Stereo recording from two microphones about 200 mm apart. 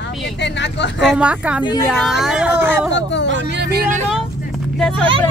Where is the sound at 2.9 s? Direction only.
60° left (ahead or behind).